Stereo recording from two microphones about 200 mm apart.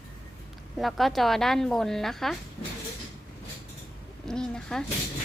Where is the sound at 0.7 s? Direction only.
Centre (ahead or behind).